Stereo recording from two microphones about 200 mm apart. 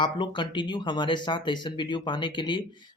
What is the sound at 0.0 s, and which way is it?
Speech, 25° left (ahead or behind).